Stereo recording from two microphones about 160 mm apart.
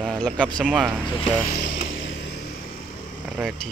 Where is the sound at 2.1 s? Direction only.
90° left.